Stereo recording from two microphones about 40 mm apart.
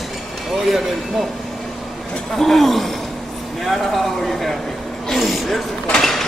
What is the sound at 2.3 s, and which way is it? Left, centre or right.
A man's voice, centre.